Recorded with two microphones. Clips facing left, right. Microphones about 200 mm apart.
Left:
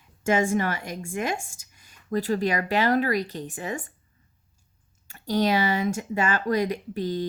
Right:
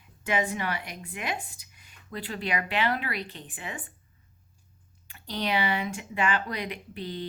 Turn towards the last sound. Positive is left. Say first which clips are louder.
# left 8 dB
turn(degrees=40)  # may be behind; listen again after turning